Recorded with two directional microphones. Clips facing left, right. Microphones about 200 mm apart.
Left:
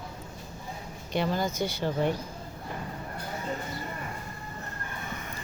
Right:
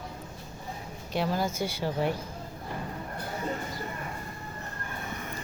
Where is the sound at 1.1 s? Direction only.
5° right (ahead or behind).